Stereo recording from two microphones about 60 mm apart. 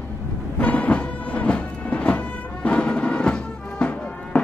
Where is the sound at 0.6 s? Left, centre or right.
Left.